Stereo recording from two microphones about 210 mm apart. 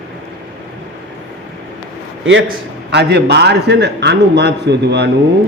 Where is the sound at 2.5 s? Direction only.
50° right (ahead or behind).